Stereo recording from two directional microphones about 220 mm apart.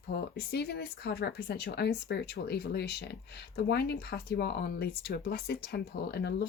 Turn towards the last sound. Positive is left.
turn(degrees=50)  # may be behind; listen again after turning